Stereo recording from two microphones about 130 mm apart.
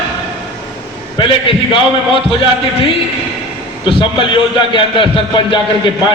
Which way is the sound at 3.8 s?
40° left (ahead or behind).